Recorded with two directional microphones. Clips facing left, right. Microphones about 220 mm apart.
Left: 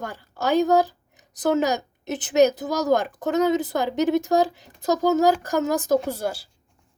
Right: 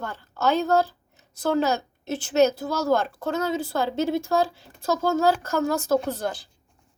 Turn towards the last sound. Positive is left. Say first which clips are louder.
# left 1 dB
turn(degrees=10)  # may be behind; listen again after turning